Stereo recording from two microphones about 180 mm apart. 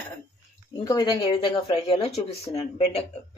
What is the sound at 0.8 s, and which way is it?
Speech, 25° left (ahead or behind).